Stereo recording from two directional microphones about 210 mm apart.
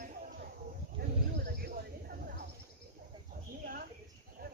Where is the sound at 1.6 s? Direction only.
45° right (ahead or behind).